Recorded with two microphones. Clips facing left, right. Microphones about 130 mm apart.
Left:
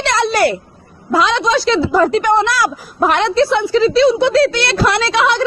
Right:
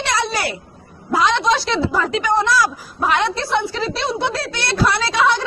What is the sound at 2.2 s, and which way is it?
A woman's voice, 65° left (ahead or behind).